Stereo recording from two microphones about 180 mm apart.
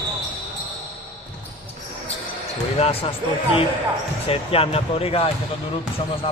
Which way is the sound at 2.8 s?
30° left (ahead or behind).